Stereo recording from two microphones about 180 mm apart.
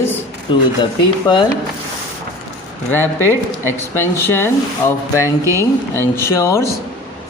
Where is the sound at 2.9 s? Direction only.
10° left (ahead or behind).